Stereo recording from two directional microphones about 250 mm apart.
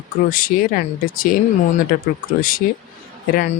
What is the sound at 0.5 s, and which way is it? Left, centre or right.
Speech, left.